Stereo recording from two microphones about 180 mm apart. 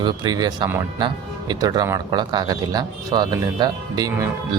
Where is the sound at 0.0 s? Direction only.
25° right (ahead or behind).